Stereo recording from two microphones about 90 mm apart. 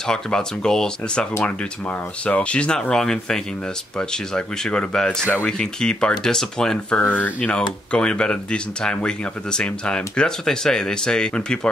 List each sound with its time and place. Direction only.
0.0 s speech: 5° left (ahead or behind)